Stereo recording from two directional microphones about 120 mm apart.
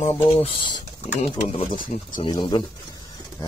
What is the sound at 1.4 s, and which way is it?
Speech, 55° left (ahead or behind).